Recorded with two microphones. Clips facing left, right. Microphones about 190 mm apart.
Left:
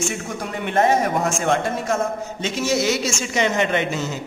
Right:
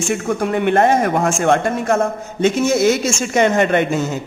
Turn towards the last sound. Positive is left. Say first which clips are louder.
# right 6 dB
turn(degrees=-50)  # may be behind; listen again after turning